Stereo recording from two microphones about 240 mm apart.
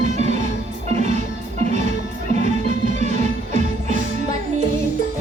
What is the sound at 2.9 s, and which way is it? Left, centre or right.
Music, right.